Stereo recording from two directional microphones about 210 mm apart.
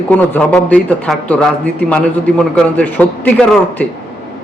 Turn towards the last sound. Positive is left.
turn(degrees=5)  # may be behind; listen again after turning